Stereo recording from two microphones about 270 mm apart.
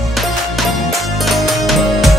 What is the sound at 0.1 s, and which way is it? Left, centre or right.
Music, centre.